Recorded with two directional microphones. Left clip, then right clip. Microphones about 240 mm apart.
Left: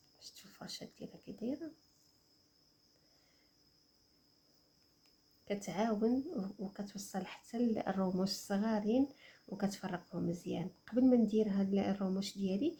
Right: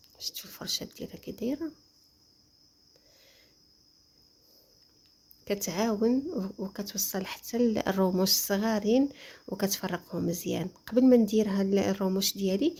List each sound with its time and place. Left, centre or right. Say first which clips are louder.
0.2 s speech: right 14 dB; right
5.5 s speech: right 7 dB; right